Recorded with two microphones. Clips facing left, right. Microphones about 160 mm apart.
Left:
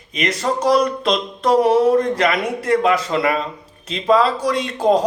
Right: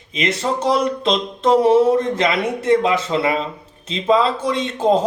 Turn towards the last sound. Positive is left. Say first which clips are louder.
# left 1 dB
turn(degrees=-25)  # may be behind; listen again after turning